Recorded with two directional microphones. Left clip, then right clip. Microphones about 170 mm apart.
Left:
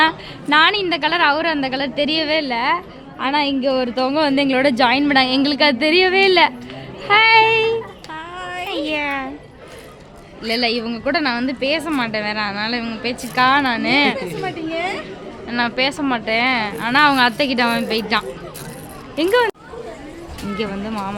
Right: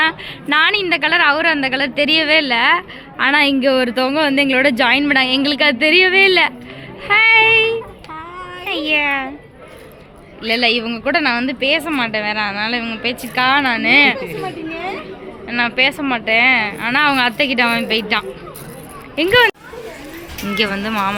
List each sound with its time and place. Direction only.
0.0 s a woman's voice: 15° left (ahead or behind)
7.1 s child singing: 20° left (ahead or behind)
8.6 s speech: 5° left (ahead or behind)
10.4 s a woman's voice: 5° left (ahead or behind)
15.4 s a woman's voice: 15° left (ahead or behind)
20.6 s speech: centre (ahead or behind)